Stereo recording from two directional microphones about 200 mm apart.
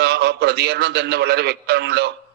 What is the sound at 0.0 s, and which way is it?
A man's voice, 55° right (ahead or behind).